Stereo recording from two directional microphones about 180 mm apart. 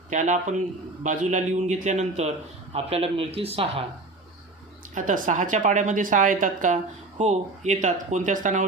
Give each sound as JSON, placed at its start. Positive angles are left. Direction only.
{"t": 0.1, "sound": "a woman's voice", "side_deg": -45}
{"t": 4.9, "sound": "a woman's voice", "side_deg": -45}